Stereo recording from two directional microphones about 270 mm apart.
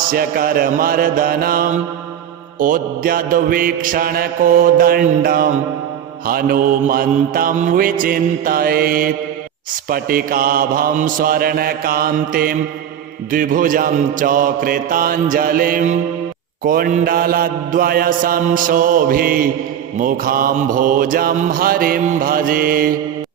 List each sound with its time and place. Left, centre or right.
0.1 s mantra: right